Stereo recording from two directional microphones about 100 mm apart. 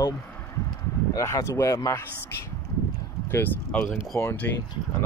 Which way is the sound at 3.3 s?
20° left (ahead or behind).